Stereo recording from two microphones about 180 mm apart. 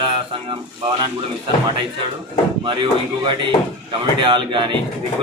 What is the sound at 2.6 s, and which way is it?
A man's voice, 25° right (ahead or behind).